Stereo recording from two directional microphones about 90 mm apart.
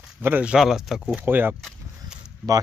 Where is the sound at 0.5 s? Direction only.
5° right (ahead or behind).